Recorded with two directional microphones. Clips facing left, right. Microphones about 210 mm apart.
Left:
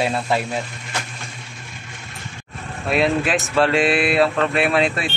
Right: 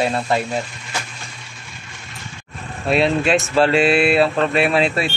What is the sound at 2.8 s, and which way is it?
Speech, centre (ahead or behind).